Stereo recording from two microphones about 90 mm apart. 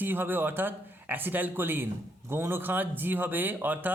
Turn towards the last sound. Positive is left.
turn(degrees=-20)  # may be behind; listen again after turning